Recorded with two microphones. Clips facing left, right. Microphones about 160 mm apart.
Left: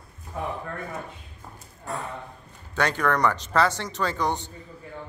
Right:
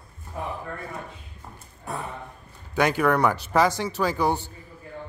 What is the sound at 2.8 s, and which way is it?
A man's voice, 10° right (ahead or behind).